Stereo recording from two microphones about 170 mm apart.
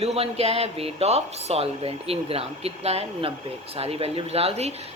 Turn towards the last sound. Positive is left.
turn(degrees=-40)  # may be behind; listen again after turning